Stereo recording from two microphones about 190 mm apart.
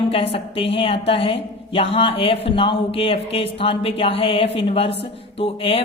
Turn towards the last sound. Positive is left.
turn(degrees=30)  # may be behind; listen again after turning